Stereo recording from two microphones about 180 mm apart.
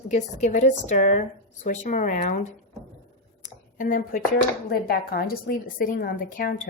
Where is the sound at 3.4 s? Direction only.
45° left (ahead or behind).